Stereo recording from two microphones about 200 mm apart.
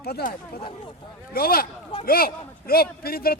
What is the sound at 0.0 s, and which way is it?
A man's voice, 50° left (ahead or behind).